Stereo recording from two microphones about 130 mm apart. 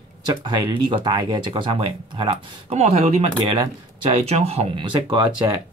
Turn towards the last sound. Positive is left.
turn(degrees=-35)  # may be behind; listen again after turning